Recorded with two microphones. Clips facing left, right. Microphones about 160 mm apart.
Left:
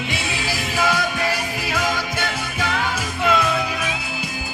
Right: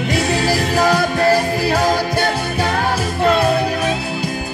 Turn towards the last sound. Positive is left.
turn(degrees=-40)  # may be behind; listen again after turning